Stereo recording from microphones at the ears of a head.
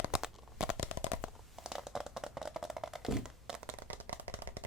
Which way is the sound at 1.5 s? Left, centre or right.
Centre.